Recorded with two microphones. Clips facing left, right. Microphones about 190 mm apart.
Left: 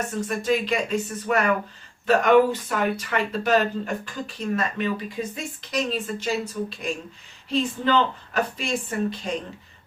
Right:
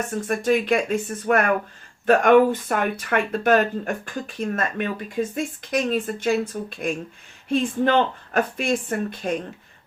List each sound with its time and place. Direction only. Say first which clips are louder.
0.1 s speech: right 4 dB; 50° right (ahead or behind)